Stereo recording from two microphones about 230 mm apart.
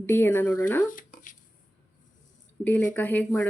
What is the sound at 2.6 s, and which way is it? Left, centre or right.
Speech, centre.